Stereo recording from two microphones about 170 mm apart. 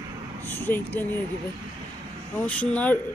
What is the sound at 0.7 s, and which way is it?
Speech, 10° left (ahead or behind).